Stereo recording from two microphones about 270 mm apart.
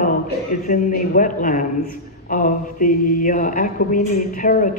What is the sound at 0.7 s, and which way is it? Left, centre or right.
A man's voice, left.